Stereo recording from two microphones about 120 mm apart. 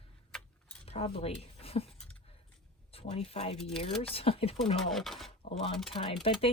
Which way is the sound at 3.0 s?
50° left (ahead or behind).